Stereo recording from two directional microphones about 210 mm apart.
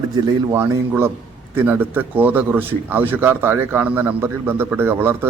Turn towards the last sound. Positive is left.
turn(degrees=-10)  # may be behind; listen again after turning